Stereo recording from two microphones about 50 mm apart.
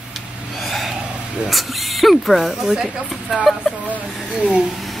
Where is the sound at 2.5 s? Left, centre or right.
Centre.